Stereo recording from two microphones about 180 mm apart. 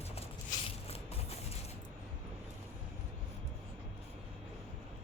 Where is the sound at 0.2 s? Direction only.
35° left (ahead or behind).